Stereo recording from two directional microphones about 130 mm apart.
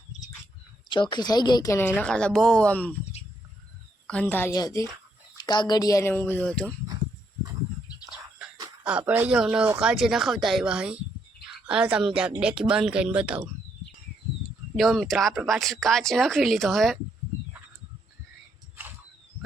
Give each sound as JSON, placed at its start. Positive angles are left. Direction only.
{"t": 0.9, "sound": "speech", "side_deg": 35}
{"t": 2.0, "sound": "a woman's voice", "side_deg": 5}
{"t": 4.0, "sound": "a woman's voice", "side_deg": 10}
{"t": 4.5, "sound": "a woman's voice", "side_deg": 30}
{"t": 8.8, "sound": "speech", "side_deg": -10}
{"t": 14.8, "sound": "speech", "side_deg": 0}